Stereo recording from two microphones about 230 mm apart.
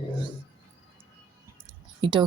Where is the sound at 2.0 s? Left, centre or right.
Centre.